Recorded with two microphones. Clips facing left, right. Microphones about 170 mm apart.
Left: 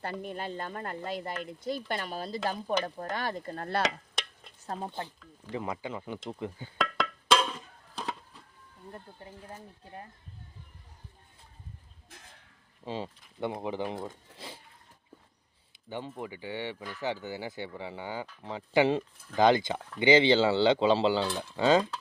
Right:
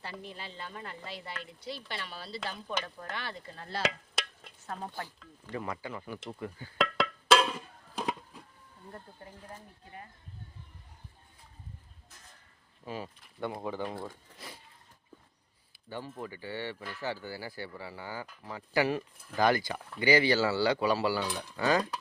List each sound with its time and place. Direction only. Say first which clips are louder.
0.0 s speech: left 7 dB; 50° left (ahead or behind)
4.6 s speech: left 3 dB; 30° left (ahead or behind)
6.7 s music: right 2 dB; 5° right (ahead or behind)
12.0 s a sound: left 4 dB; 65° left (ahead or behind)
12.8 s speech: left 3 dB; 25° left (ahead or behind)
15.7 s speech: left 2 dB; 20° left (ahead or behind)